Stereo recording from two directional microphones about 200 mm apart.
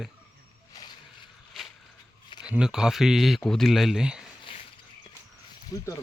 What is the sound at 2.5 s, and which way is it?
Speech, 5° right (ahead or behind).